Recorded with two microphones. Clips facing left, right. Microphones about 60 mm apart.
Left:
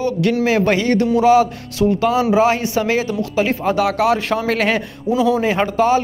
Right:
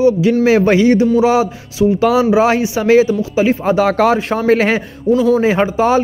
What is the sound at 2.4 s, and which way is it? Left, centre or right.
Speech, right.